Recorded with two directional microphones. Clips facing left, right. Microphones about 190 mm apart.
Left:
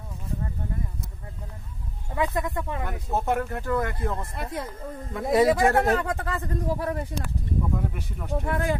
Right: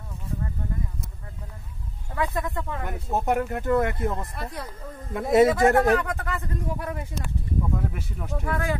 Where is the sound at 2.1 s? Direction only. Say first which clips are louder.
Left 1 dB; 15° left (ahead or behind).